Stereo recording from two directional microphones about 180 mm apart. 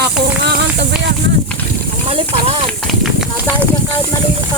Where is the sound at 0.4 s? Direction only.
65° right (ahead or behind).